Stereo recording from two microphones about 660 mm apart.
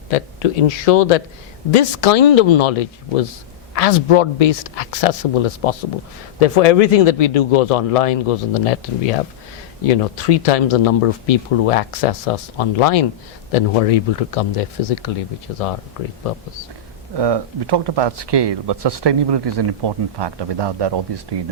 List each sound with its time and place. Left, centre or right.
0.1 s speech: left
17.2 s speech: right